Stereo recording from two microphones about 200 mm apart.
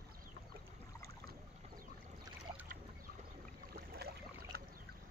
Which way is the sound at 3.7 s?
50° right (ahead or behind).